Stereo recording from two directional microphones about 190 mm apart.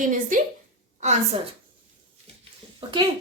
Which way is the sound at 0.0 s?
45° right (ahead or behind).